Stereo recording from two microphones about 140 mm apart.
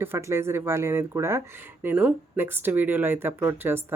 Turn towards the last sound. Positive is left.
turn(degrees=-15)  # may be behind; listen again after turning